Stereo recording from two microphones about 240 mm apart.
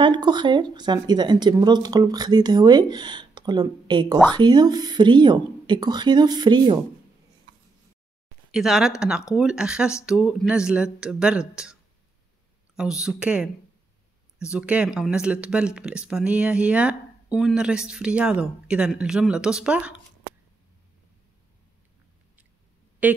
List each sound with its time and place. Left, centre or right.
0.0 s speech: centre
8.5 s speech: centre
12.7 s speech: centre
23.0 s speech: centre